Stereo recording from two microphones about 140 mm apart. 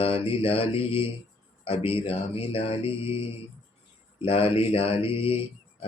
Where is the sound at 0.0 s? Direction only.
45° left (ahead or behind).